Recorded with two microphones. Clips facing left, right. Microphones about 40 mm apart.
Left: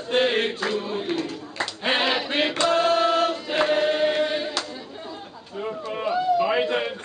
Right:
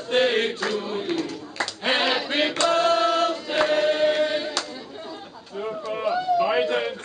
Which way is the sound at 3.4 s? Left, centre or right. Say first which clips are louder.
Even; centre.